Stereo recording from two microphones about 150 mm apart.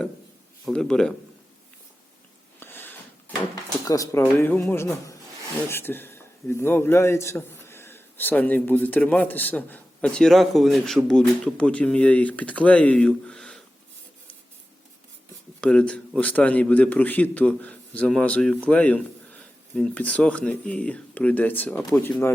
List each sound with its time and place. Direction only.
0.7 s speech: 5° left (ahead or behind)
2.6 s a sound: 15° left (ahead or behind)
3.5 s a man's voice: 25° left (ahead or behind); by 13.6 s 5° left (ahead or behind)
15.6 s a man's voice: 5° left (ahead or behind)